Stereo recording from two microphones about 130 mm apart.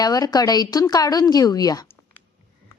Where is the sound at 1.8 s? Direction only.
15° left (ahead or behind).